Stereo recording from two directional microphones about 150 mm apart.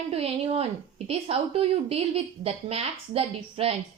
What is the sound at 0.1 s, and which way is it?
A woman's voice, 40° right (ahead or behind).